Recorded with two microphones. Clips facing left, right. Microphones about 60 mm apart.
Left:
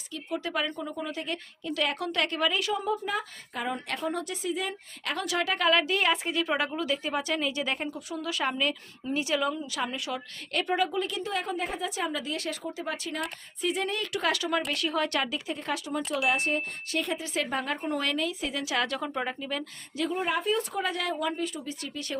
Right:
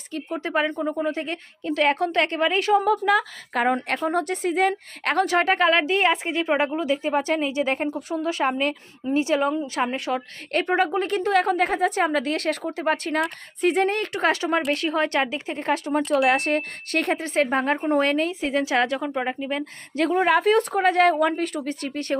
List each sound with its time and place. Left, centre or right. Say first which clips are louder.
0.1 s a woman's voice: right 6 dB; right
2.8 s a woman's voice: right 10 dB; right
11.9 s a woman's voice: right 9 dB; right
16.1 s a woman's voice: right 7 dB; right
20.0 s speech: right 9 dB; right